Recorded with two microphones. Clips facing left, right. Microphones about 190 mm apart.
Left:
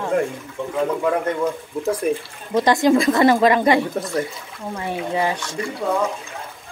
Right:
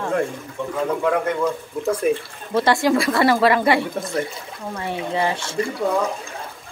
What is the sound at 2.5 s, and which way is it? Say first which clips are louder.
Speech: left 2 dB; 15° left (ahead or behind).